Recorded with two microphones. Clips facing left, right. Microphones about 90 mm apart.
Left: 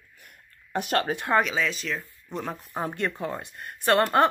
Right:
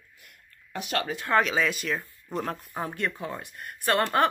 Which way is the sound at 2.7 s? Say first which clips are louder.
Left 2 dB; 25° left (ahead or behind).